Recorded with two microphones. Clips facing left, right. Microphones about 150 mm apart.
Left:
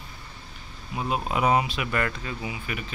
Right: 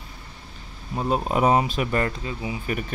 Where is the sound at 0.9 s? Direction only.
35° right (ahead or behind).